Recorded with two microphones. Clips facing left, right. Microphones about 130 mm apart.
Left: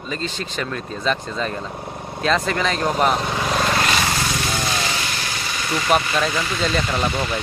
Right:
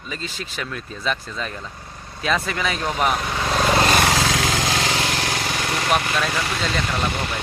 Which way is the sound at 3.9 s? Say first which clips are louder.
Right 3 dB; 80° right.